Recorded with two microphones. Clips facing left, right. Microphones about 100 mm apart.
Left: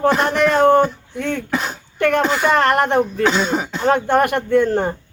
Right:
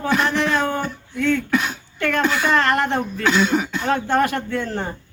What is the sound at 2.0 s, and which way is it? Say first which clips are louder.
Speech: left 5 dB; 55° left (ahead or behind).